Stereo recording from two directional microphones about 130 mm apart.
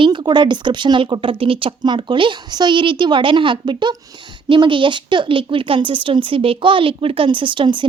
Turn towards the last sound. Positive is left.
turn(degrees=-40)  # may be behind; listen again after turning